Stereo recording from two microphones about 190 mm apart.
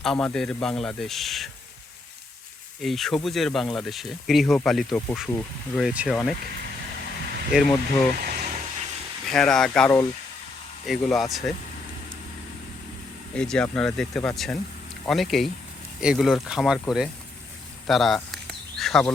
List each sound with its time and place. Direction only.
0.0 s speech: 5° left (ahead or behind)
2.8 s speech: centre (ahead or behind)
7.5 s speech: centre (ahead or behind)
8.2 s a sound: 40° right (ahead or behind)
9.2 s speech: 5° left (ahead or behind)
13.3 s speech: 5° left (ahead or behind)
17.8 s a sound: centre (ahead or behind)